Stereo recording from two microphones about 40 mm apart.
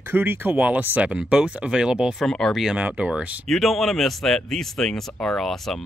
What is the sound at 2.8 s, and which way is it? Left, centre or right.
Speech, right.